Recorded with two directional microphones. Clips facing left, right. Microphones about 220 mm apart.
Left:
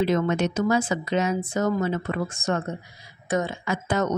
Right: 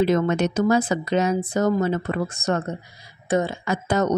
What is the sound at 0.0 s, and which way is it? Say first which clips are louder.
Speech: right 3 dB; 40° right (ahead or behind).